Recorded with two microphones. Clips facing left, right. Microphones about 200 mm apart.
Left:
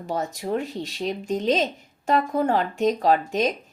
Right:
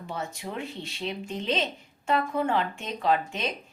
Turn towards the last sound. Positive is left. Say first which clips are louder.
# left 6 dB
turn(degrees=40)  # may be behind; listen again after turning